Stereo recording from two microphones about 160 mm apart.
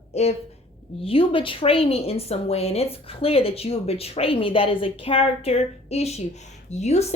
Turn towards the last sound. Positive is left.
turn(degrees=45)  # may be behind; listen again after turning